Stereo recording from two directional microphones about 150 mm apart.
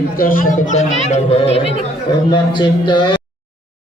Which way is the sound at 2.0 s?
30° left (ahead or behind).